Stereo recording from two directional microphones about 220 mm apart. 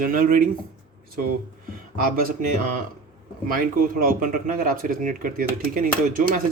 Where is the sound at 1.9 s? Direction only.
40° right (ahead or behind).